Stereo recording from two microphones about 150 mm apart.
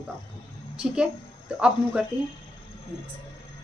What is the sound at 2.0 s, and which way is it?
Speech, 5° right (ahead or behind).